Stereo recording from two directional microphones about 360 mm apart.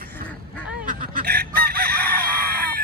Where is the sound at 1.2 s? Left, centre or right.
Right.